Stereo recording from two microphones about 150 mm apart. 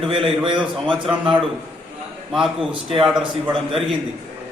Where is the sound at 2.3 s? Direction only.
5° right (ahead or behind).